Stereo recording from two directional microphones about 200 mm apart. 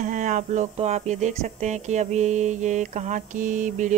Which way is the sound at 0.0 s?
40° right (ahead or behind).